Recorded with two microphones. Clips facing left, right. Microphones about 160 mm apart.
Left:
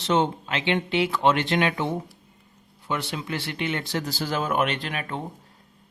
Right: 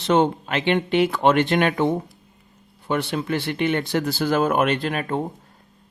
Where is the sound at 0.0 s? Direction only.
55° right (ahead or behind).